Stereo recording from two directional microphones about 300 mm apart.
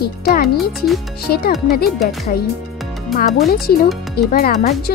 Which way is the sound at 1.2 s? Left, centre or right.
Left.